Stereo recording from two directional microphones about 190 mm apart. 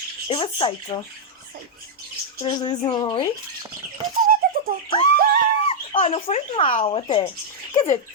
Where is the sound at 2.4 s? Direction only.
25° left (ahead or behind).